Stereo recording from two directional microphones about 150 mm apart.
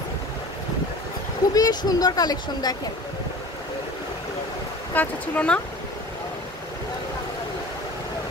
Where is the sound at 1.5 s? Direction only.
25° left (ahead or behind).